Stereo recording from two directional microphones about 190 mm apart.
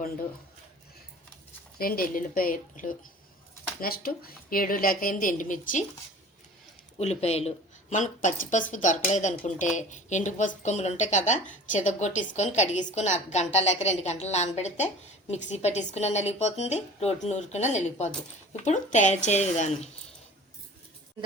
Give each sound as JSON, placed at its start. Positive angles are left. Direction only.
{"t": 1.8, "sound": "a woman's voice", "side_deg": 50}
{"t": 7.0, "sound": "a woman's voice", "side_deg": 35}